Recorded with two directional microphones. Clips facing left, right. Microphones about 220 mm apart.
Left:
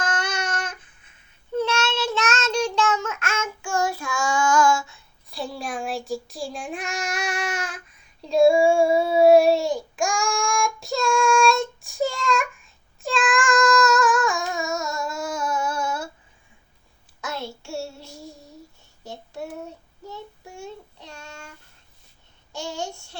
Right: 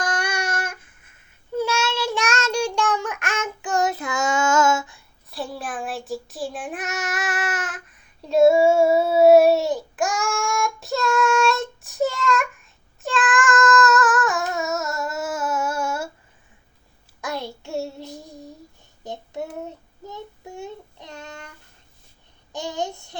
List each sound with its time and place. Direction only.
0.0 s a sound: 10° right (ahead or behind)
1.5 s child singing: 10° right (ahead or behind)
5.3 s child singing: centre (ahead or behind)
17.2 s child singing: 15° right (ahead or behind)
22.5 s child singing: 20° right (ahead or behind)